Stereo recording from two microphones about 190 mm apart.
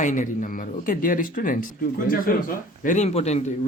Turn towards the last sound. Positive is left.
turn(degrees=35)  # may be behind; listen again after turning